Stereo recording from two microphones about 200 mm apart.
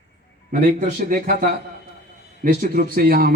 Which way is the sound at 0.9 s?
45° right (ahead or behind).